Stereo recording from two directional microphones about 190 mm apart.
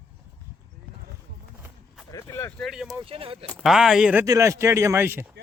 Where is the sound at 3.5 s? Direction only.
Centre (ahead or behind).